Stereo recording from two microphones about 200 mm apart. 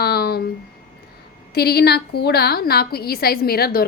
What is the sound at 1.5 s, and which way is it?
A woman's voice, 50° left (ahead or behind).